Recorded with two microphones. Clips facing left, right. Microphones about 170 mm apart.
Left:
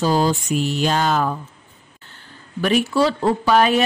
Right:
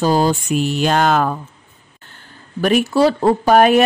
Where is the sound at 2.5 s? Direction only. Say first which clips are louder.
Right 3 dB; 45° right (ahead or behind).